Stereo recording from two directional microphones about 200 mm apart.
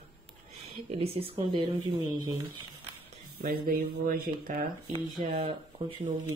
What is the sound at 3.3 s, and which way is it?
Speech, 50° right (ahead or behind).